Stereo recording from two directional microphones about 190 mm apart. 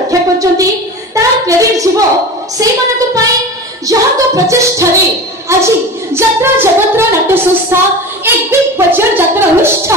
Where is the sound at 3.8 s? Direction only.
15° right (ahead or behind).